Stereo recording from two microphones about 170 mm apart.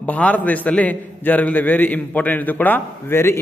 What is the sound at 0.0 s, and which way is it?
Mantra, 10° left (ahead or behind).